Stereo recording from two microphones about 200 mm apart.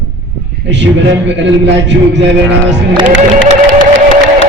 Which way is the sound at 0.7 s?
65° right (ahead or behind).